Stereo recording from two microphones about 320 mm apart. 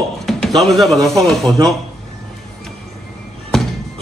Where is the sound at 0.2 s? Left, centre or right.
Centre.